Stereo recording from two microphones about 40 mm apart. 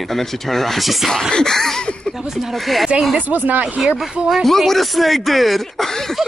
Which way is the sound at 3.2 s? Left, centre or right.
Right.